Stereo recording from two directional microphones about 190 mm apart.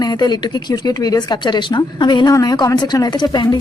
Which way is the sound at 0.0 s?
20° left (ahead or behind).